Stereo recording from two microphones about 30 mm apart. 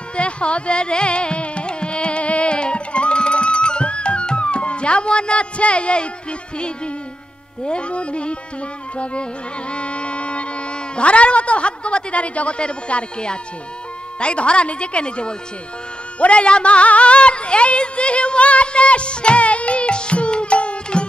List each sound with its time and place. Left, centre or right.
0.1 s carnatic music: left
7.6 s a woman's voice: left
8.9 s music: left
11.0 s a woman's voice: left
16.2 s music: left